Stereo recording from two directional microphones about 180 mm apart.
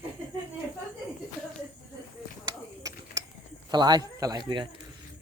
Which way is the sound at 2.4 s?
20° right (ahead or behind).